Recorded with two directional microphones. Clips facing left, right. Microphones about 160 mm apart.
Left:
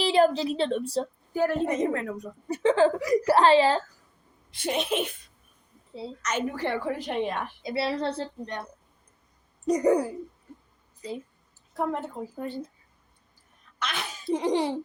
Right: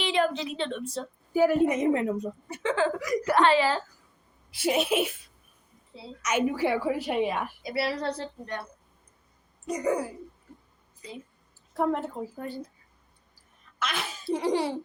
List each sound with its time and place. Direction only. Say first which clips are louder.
0.0 s a woman's voice: left 5 dB; 35° left (ahead or behind)
1.3 s a woman's voice: right 4 dB; 10° right (ahead or behind)
2.5 s a woman's voice: left 6 dB; 35° left (ahead or behind)
4.5 s a woman's voice: right 2 dB; 5° right (ahead or behind)
6.2 s a woman's voice: right 4 dB; 10° right (ahead or behind)
7.6 s a woman's voice: left 3 dB; 25° left (ahead or behind)
9.6 s a woman's voice: left 6 dB; 35° left (ahead or behind)
11.7 s a woman's voice: right 2 dB; centre (ahead or behind)
13.7 s speech: right 1 dB; 5° right (ahead or behind)
14.3 s a woman's voice: left 1 dB; 20° left (ahead or behind)